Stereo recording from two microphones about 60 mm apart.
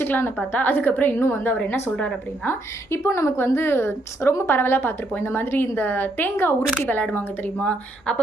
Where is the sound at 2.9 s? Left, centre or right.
Left.